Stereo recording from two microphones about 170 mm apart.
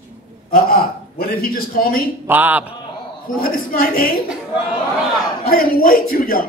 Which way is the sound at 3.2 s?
60° left (ahead or behind).